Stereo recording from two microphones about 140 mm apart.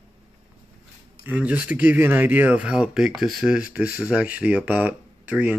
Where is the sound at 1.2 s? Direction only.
10° right (ahead or behind).